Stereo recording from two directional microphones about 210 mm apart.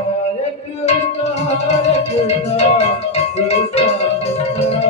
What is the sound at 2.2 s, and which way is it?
Music, 30° left (ahead or behind).